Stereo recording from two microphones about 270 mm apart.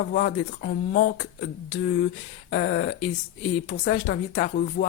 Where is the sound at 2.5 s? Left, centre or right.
Left.